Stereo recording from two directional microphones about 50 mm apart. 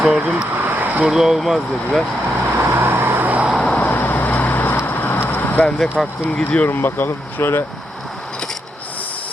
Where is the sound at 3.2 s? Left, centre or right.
Right.